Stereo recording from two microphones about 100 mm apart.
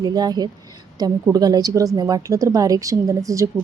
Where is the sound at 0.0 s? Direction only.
40° right (ahead or behind).